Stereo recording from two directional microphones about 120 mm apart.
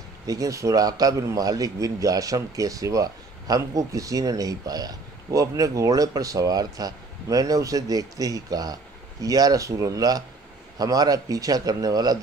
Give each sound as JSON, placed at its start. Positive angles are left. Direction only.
{"t": 0.3, "sound": "a man's voice", "side_deg": -30}